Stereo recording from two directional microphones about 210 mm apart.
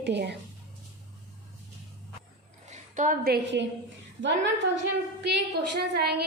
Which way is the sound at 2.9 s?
40° right (ahead or behind).